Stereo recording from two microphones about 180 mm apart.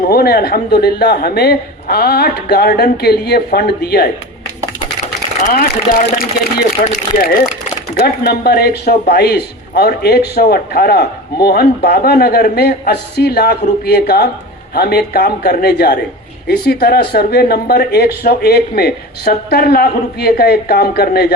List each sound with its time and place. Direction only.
0.0 s a man's voice: 55° left (ahead or behind)
5.4 s a man's voice: 45° left (ahead or behind)